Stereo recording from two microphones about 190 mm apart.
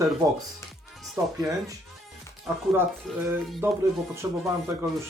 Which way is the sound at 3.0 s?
Centre (ahead or behind).